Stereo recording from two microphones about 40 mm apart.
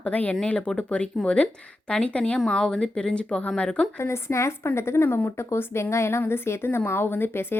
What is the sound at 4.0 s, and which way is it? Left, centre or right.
Speech, left.